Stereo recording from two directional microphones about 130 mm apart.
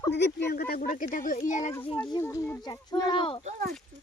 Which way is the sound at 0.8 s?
90° left.